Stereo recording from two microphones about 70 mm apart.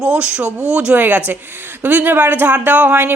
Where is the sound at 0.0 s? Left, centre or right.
Centre.